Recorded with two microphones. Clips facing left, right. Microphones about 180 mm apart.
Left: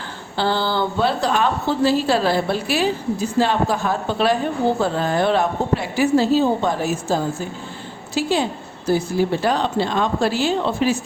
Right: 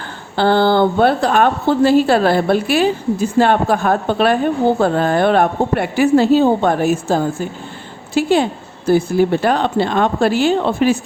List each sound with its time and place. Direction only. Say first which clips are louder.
0.3 s a woman's voice: right 8 dB; 55° right (ahead or behind)